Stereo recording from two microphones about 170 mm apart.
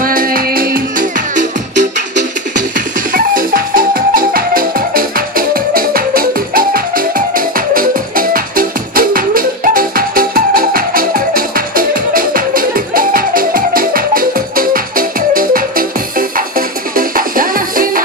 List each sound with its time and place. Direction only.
0.0 s music: 55° right (ahead or behind)